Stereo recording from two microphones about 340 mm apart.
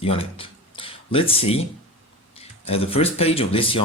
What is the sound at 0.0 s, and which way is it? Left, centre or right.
Speech, centre.